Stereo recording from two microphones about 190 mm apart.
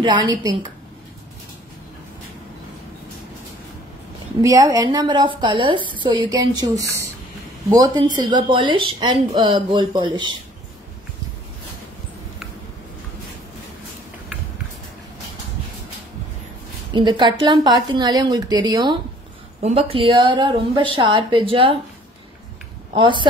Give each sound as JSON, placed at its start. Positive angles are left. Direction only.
{"t": 0.0, "sound": "speech", "side_deg": -20}
{"t": 4.4, "sound": "speech", "side_deg": -15}
{"t": 16.9, "sound": "speech", "side_deg": -25}
{"t": 22.9, "sound": "speech", "side_deg": -25}